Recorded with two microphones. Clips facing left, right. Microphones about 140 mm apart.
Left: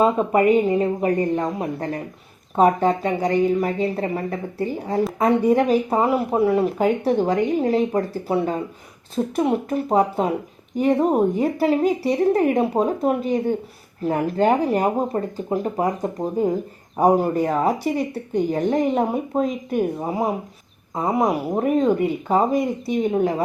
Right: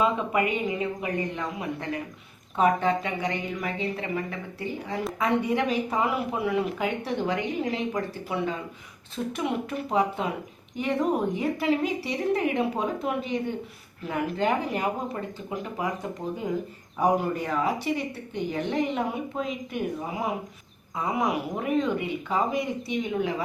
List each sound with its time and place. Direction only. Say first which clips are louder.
0.0 s speech: left 7 dB; 40° left (ahead or behind)